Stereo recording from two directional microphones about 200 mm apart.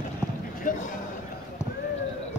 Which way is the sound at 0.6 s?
40° left (ahead or behind).